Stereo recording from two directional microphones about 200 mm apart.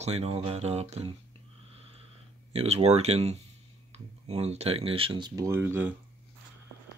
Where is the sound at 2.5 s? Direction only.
30° right (ahead or behind); by 5.9 s 10° right (ahead or behind).